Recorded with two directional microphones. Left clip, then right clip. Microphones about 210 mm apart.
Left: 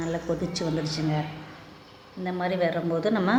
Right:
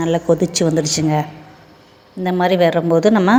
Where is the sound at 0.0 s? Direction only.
35° right (ahead or behind).